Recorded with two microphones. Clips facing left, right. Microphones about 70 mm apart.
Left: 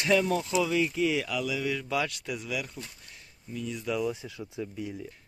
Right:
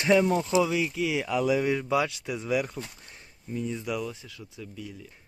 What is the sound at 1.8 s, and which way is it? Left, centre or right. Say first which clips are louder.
Speech: right 4 dB; centre.